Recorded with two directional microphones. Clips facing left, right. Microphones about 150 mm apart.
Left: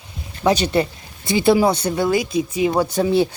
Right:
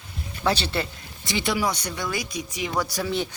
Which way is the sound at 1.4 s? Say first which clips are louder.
Left 11 dB; 30° left (ahead or behind).